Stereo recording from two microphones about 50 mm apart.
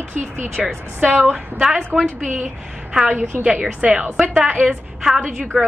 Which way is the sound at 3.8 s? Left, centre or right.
Right.